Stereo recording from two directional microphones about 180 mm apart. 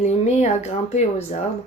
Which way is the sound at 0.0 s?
40° left (ahead or behind).